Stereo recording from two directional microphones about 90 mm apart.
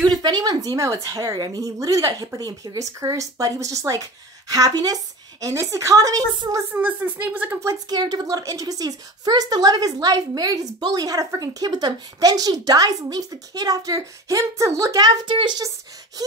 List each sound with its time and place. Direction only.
0.1 s a woman's voice: 50° right (ahead or behind)
6.7 s a woman's voice: 20° right (ahead or behind)
7.9 s a woman's voice: 50° right (ahead or behind)
15.3 s speech: 60° right (ahead or behind)
16.2 s a woman's voice: 45° right (ahead or behind)